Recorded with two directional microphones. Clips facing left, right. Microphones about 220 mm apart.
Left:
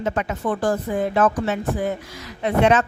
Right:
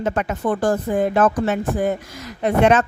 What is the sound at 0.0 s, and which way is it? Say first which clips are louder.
A woman's voice: right 2 dB; 50° right (ahead or behind).